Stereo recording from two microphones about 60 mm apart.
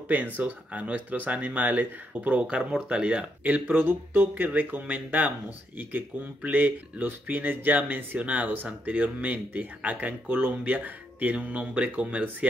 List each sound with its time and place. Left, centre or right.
0.1 s speech: right
3.6 s speech: right